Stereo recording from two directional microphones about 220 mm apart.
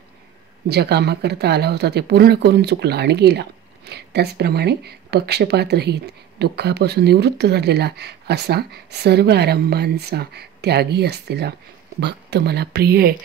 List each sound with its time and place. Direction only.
0.7 s speech: 50° right (ahead or behind)